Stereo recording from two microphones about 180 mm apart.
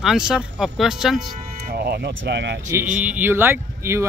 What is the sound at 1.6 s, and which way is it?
Speech, 60° right (ahead or behind).